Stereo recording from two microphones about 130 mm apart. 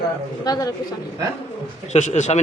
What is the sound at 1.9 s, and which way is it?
Speech, 65° left (ahead or behind).